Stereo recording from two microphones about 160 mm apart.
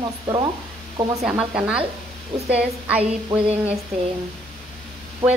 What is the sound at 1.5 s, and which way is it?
A woman's voice, 5° right (ahead or behind).